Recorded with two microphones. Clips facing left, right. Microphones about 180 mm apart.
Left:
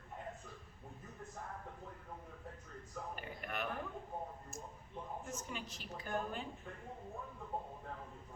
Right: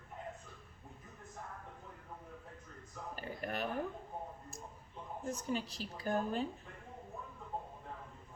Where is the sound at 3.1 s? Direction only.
35° right (ahead or behind).